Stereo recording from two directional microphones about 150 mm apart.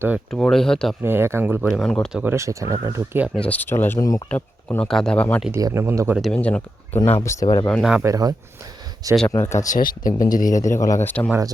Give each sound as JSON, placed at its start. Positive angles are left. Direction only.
{"t": 0.3, "sound": "speech", "side_deg": 5}
{"t": 1.0, "sound": "speech", "side_deg": -15}
{"t": 1.6, "sound": "speech", "side_deg": 0}
{"t": 2.1, "sound": "speech", "side_deg": -15}
{"t": 3.3, "sound": "speech", "side_deg": 10}
{"t": 5.5, "sound": "speech", "side_deg": -20}
{"t": 6.1, "sound": "speech", "side_deg": 5}
{"t": 7.2, "sound": "speech", "side_deg": 20}
{"t": 7.7, "sound": "speech", "side_deg": 0}
{"t": 8.0, "sound": "speech", "side_deg": -25}
{"t": 9.3, "sound": "speech", "side_deg": 20}
{"t": 9.6, "sound": "speech", "side_deg": 65}
{"t": 10.6, "sound": "speech", "side_deg": 20}
{"t": 11.0, "sound": "speech", "side_deg": 10}